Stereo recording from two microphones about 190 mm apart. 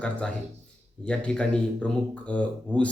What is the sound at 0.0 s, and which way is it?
Speech, 5° left (ahead or behind).